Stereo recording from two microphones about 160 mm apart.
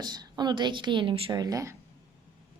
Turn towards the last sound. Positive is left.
turn(degrees=-20)  # may be behind; listen again after turning